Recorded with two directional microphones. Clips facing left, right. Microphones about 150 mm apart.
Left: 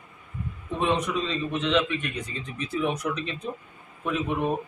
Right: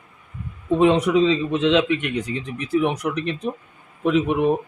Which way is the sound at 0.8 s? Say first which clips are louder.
Right 9 dB; 90° right.